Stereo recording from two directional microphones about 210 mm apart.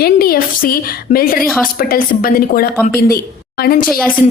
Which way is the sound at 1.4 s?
Centre (ahead or behind).